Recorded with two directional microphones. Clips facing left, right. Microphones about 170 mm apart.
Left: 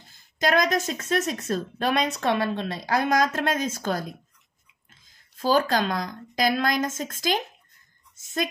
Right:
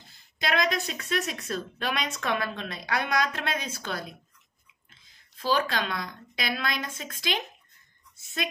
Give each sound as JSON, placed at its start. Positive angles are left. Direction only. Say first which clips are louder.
{"t": 0.1, "sound": "a woman's voice", "louder": "left 6 dB", "side_deg": 45}